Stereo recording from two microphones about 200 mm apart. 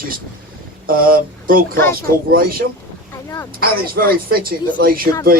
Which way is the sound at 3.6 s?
50° right (ahead or behind).